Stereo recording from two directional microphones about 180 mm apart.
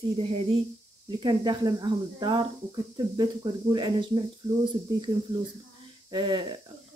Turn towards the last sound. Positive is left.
turn(degrees=-25)  # may be behind; listen again after turning